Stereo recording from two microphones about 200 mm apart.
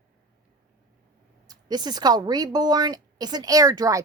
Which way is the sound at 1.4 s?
20° right (ahead or behind).